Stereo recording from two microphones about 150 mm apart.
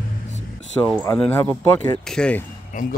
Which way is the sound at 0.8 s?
20° left (ahead or behind).